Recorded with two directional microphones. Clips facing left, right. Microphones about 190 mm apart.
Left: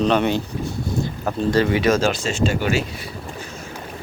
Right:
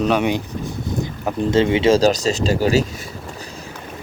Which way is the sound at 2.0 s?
40° right (ahead or behind).